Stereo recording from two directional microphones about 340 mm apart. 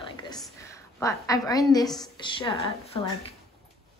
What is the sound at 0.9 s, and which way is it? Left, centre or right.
Speech, centre.